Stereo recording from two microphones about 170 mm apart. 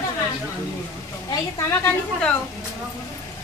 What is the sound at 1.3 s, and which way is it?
Speech, 15° left (ahead or behind).